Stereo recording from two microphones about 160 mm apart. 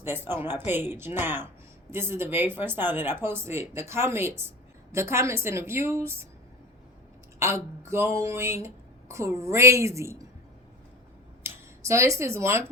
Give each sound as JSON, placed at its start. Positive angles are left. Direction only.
{"t": 0.0, "sound": "speech", "side_deg": -15}
{"t": 7.3, "sound": "speech", "side_deg": -15}
{"t": 11.4, "sound": "speech", "side_deg": -20}